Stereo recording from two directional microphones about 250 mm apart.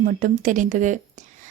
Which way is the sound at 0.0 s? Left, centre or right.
Right.